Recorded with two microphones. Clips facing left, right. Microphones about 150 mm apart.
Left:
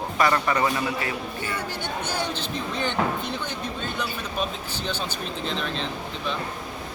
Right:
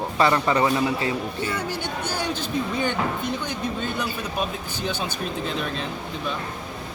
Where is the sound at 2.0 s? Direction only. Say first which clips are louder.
Right 2 dB; 10° right (ahead or behind).